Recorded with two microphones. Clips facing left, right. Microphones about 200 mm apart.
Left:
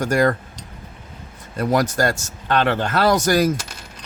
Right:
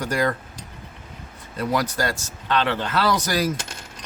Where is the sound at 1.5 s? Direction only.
45° left (ahead or behind).